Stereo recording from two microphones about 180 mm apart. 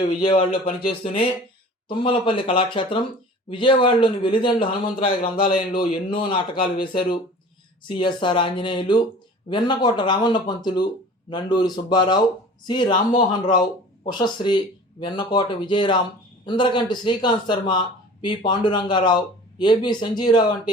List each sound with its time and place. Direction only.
0.0 s a man's voice: 25° left (ahead or behind)
5.4 s a man's voice: 50° left (ahead or behind)
6.1 s a man's voice: 25° left (ahead or behind)
14.0 s a man's voice: 25° left (ahead or behind)